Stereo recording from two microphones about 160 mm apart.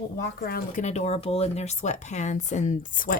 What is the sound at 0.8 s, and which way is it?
Speech, 45° left (ahead or behind).